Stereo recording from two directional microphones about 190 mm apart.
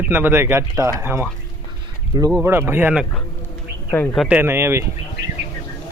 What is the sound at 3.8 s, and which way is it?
Speech, 10° left (ahead or behind).